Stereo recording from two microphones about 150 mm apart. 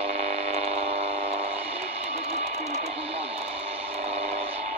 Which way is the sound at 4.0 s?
45° right (ahead or behind).